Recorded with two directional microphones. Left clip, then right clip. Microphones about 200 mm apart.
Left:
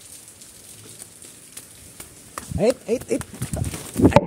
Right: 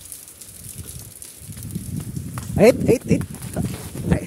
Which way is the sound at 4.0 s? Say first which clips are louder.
Left 16 dB; 55° left (ahead or behind).